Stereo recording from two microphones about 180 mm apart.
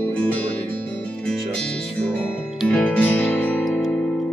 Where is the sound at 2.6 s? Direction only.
5° left (ahead or behind).